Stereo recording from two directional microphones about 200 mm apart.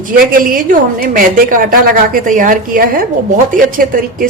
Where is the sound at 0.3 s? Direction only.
45° right (ahead or behind).